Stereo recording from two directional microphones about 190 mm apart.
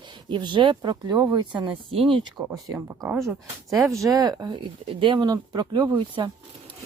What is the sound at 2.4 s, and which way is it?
Speech, 15° right (ahead or behind).